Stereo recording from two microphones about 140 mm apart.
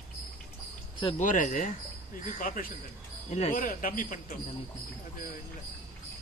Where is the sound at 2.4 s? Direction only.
80° left.